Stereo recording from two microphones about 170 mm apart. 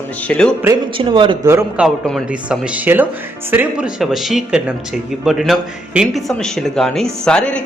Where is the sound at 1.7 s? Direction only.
Centre (ahead or behind).